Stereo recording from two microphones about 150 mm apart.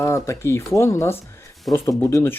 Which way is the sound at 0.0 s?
15° left (ahead or behind).